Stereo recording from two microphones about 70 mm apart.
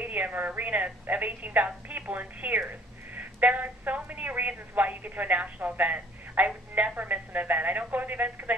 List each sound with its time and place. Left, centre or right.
0.0 s a woman's voice: right